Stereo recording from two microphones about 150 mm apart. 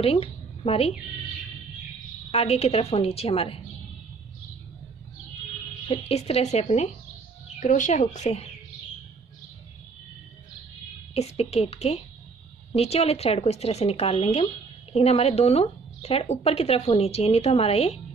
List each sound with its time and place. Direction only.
0.0 s speech: 40° left (ahead or behind)
2.3 s a woman's voice: 45° left (ahead or behind)
5.9 s speech: 40° left (ahead or behind)
11.1 s speech: 45° left (ahead or behind)